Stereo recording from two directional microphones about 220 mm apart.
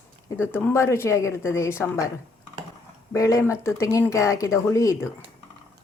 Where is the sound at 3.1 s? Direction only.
15° left (ahead or behind).